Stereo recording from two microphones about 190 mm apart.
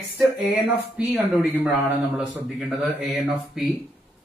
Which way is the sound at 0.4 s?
5° right (ahead or behind).